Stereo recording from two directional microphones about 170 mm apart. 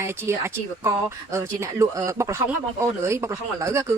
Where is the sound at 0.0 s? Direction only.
15° right (ahead or behind).